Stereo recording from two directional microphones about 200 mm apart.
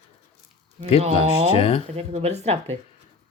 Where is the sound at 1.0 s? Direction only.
30° right (ahead or behind).